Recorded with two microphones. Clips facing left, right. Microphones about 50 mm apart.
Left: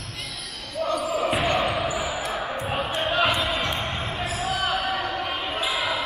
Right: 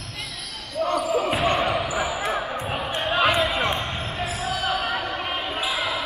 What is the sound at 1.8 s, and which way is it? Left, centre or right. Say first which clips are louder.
Basketball bounce: right 1 dB; centre.